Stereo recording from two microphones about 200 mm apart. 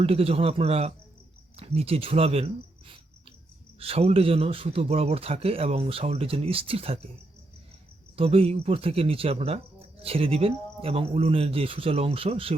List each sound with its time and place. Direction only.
0.0 s speech: 30° right (ahead or behind)
8.1 s speech: 30° right (ahead or behind)